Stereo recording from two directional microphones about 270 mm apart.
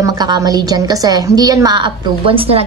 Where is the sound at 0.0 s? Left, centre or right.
Centre.